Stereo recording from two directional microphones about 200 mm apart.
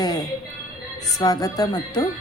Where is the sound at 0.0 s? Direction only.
20° left (ahead or behind).